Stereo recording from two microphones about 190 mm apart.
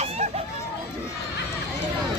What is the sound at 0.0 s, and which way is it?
Hubbub, 35° right (ahead or behind).